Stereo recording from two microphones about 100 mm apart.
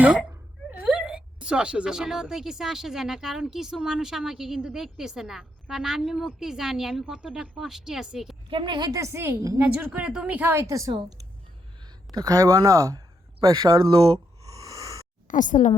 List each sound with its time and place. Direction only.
0.0 s a woman's voice: 10° right (ahead or behind)
8.4 s a woman's voice: 55° right (ahead or behind)
8.9 s a woman's voice: 30° right (ahead or behind)
9.6 s speech: 15° right (ahead or behind)
10.7 s speech: 35° right (ahead or behind)
12.1 s speech: 35° right (ahead or behind); by 14.2 s 55° right (ahead or behind)
14.5 s a sound: 35° right (ahead or behind)